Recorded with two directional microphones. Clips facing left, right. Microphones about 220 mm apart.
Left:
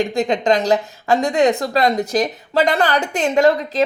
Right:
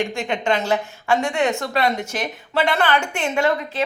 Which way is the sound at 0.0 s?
35° left (ahead or behind).